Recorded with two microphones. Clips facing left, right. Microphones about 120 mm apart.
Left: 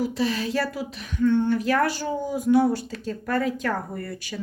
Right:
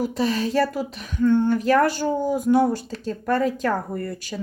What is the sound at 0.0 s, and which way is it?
Speech, 45° right (ahead or behind).